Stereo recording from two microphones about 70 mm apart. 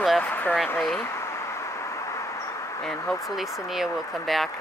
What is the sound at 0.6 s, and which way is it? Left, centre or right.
Speech, centre.